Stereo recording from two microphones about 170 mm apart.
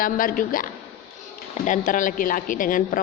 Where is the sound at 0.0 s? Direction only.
55° left (ahead or behind).